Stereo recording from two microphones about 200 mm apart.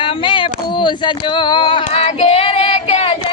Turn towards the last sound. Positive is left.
turn(degrees=30)  # may be behind; listen again after turning